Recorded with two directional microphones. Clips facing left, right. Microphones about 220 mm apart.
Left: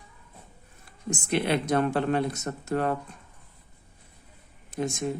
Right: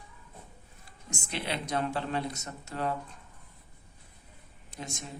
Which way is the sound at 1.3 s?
55° left (ahead or behind).